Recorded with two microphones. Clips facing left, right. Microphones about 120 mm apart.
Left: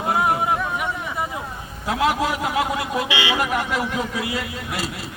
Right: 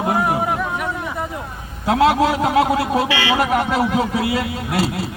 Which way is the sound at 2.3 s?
40° right (ahead or behind).